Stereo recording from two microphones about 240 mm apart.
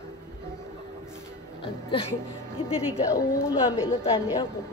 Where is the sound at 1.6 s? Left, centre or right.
Left.